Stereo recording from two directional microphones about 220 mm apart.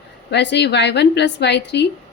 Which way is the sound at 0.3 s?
50° left (ahead or behind).